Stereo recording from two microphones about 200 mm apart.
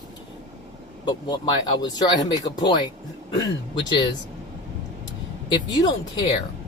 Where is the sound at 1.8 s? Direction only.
20° left (ahead or behind).